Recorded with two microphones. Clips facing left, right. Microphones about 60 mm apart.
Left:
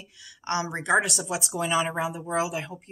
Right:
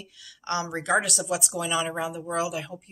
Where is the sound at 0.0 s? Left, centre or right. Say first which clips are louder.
Left 1 dB; left.